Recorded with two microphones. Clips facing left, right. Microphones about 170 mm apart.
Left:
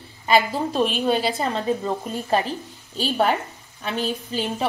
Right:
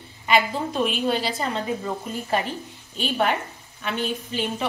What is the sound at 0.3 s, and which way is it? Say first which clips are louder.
A woman's voice: left 2 dB; 35° left (ahead or behind).